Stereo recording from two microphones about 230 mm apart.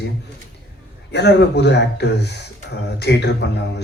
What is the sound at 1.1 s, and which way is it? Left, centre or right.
Speech, left.